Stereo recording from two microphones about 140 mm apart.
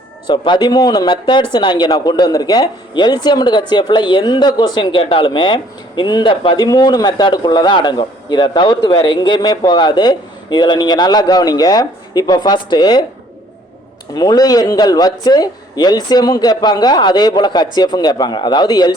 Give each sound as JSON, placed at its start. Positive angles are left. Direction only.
{"t": 0.3, "sound": "speech", "side_deg": 30}
{"t": 14.2, "sound": "speech", "side_deg": 25}